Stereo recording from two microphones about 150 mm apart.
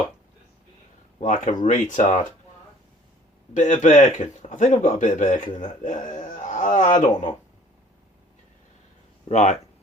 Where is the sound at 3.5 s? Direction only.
50° left (ahead or behind).